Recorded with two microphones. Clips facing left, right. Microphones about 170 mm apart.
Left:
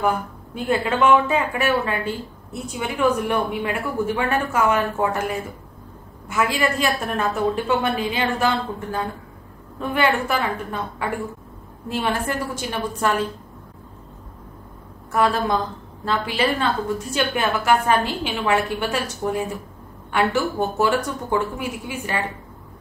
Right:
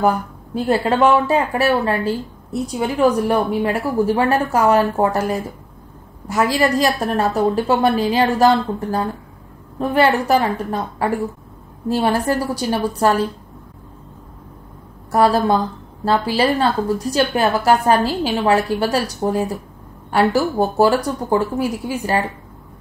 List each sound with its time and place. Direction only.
0.6 s a woman's voice: 35° right (ahead or behind)
15.0 s a woman's voice: 35° right (ahead or behind)